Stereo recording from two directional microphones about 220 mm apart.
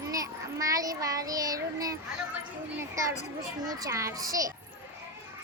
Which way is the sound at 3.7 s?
15° right (ahead or behind).